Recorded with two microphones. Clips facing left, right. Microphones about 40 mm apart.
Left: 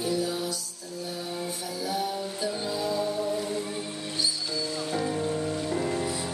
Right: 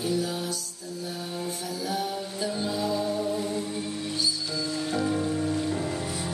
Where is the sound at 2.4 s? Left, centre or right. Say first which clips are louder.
Right 3 dB; centre.